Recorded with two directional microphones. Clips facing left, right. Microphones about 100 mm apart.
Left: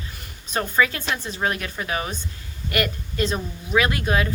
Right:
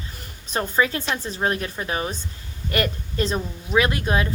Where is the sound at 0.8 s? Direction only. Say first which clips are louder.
Even; 30° right (ahead or behind).